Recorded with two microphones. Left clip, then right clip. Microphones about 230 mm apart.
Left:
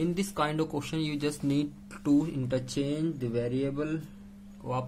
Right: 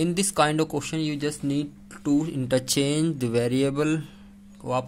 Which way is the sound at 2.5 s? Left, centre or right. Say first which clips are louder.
Right 8 dB; right.